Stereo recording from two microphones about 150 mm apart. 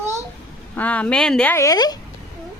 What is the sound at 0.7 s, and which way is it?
Speech, 10° left (ahead or behind).